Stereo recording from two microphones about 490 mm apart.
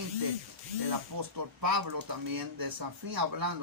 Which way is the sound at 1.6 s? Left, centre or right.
Right.